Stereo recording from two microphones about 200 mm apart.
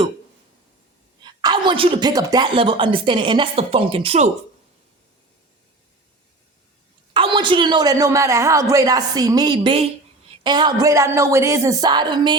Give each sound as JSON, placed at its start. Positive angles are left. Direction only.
{"t": 1.2, "sound": "speech", "side_deg": -20}
{"t": 7.1, "sound": "speech", "side_deg": -25}